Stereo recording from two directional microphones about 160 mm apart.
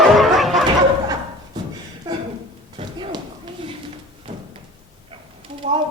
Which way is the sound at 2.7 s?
30° right (ahead or behind).